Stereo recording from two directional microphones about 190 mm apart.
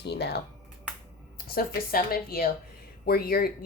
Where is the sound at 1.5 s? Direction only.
50° left (ahead or behind).